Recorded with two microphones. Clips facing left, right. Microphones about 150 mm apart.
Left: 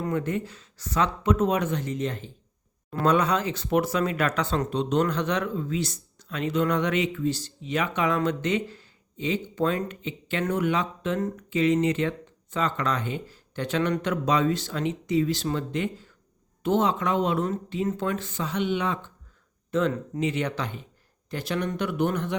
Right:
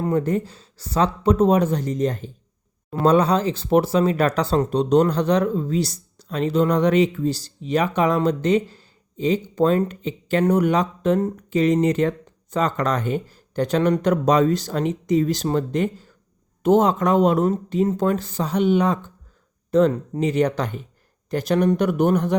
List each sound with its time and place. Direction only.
0.0 s speech: 35° right (ahead or behind)